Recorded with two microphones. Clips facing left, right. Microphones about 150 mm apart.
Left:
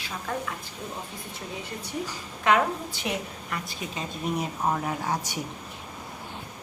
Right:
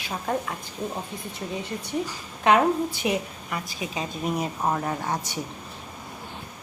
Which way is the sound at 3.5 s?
10° right (ahead or behind).